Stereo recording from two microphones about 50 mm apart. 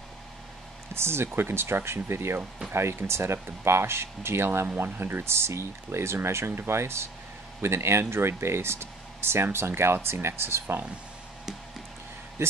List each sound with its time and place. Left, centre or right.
0.9 s speech: right